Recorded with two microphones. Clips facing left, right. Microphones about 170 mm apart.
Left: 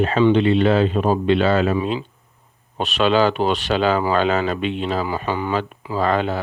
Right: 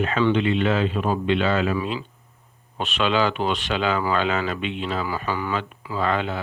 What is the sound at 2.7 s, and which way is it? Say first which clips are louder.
Speech: left 5 dB; 40° left (ahead or behind).